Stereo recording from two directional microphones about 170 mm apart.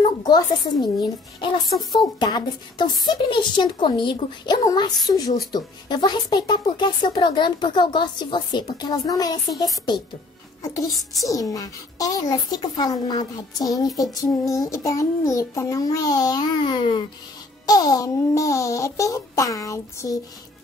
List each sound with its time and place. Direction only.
0.0 s a sound: 25° left (ahead or behind)
0.8 s a woman's voice: 25° left (ahead or behind)
10.6 s a woman's voice: 20° left (ahead or behind)